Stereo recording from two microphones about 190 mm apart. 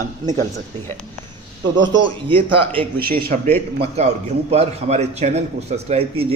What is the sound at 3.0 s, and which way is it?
Speech, 50° right (ahead or behind).